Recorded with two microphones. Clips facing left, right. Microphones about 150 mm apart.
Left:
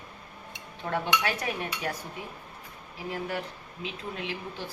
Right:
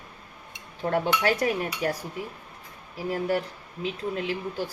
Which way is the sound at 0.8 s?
40° right (ahead or behind).